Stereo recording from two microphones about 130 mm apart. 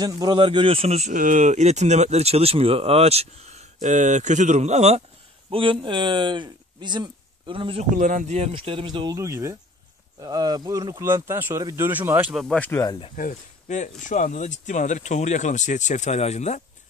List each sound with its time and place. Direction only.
0.0 s a man's voice: 35° right (ahead or behind); by 1.1 s 55° right (ahead or behind)
1.1 s speech: 85° right; by 5.0 s 55° right (ahead or behind)
5.5 s speech: 40° right (ahead or behind)
7.9 s speech: 90° right; by 8.5 s 70° right (ahead or behind)
8.5 s speech: 40° right (ahead or behind); by 9.6 s 20° right (ahead or behind)
10.2 s speech: 30° right (ahead or behind); by 12.4 s 15° right (ahead or behind)
12.5 s speech: 15° left (ahead or behind)
13.1 s speech: 80° left; by 16.6 s 60° left (ahead or behind)